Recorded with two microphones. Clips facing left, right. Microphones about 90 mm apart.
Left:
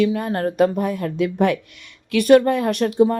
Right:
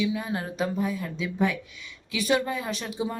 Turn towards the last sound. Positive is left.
turn(degrees=60)  # may be behind; listen again after turning